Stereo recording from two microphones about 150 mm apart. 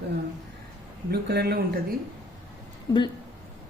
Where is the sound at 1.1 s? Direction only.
90° right.